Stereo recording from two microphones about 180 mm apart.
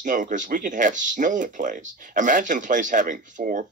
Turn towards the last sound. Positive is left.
turn(degrees=-50)  # may be behind; listen again after turning